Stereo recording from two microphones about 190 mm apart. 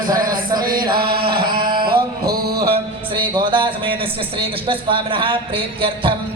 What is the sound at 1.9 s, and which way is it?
Music, 55° right (ahead or behind).